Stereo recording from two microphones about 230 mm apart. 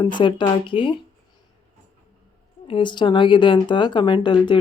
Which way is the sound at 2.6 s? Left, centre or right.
Left.